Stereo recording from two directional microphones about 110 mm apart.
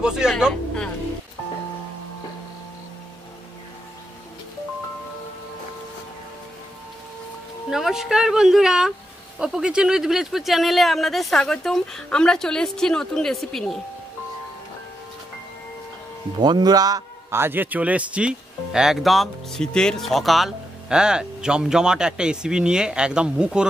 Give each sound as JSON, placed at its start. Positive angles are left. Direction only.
{"t": 0.0, "sound": "speech", "side_deg": -5}
{"t": 7.7, "sound": "speech", "side_deg": -5}
{"t": 16.3, "sound": "speech", "side_deg": -40}
{"t": 17.3, "sound": "speech", "side_deg": -20}